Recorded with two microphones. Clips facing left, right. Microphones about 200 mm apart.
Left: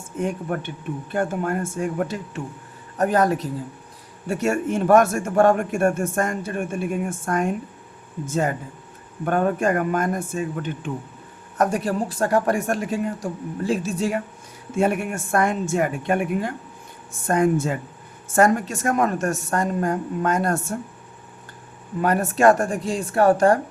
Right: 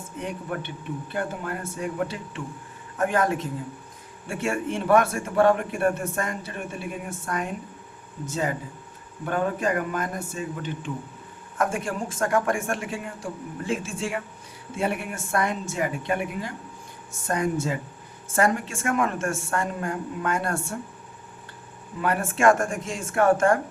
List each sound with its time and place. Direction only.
0.2 s a man's voice: 45° left (ahead or behind)
11.5 s a woman's voice: 40° left (ahead or behind)
22.0 s a woman's voice: 40° left (ahead or behind)